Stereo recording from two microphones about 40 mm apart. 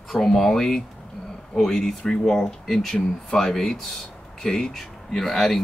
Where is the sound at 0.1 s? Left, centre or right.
Centre.